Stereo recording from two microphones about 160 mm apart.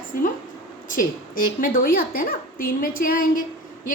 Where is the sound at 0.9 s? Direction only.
60° left (ahead or behind).